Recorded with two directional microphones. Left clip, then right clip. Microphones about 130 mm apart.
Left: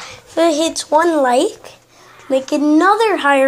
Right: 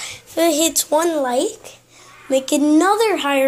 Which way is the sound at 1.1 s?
30° left (ahead or behind).